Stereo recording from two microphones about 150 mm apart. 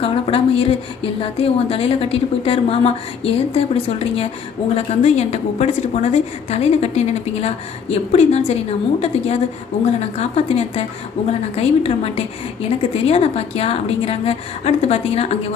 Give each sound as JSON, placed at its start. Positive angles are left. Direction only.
{"t": 0.0, "sound": "a woman's voice", "side_deg": 40}